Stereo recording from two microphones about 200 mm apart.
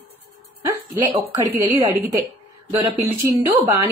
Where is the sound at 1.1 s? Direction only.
25° right (ahead or behind).